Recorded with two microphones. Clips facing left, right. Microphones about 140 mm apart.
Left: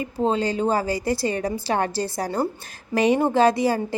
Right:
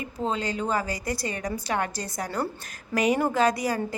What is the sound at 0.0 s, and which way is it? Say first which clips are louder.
A woman's voice: left 6 dB; 30° left (ahead or behind).